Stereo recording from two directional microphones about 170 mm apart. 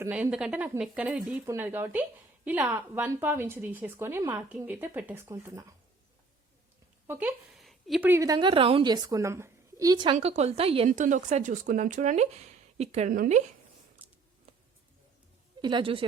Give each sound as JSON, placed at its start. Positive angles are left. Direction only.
{"t": 0.0, "sound": "a woman's voice", "side_deg": -5}
{"t": 7.1, "sound": "a sound", "side_deg": -10}
{"t": 8.1, "sound": "a woman's voice", "side_deg": -20}
{"t": 10.2, "sound": "a woman's voice", "side_deg": -40}
{"t": 10.9, "sound": "speech", "side_deg": -45}
{"t": 13.1, "sound": "speech", "side_deg": -50}
{"t": 15.6, "sound": "a woman's voice", "side_deg": -30}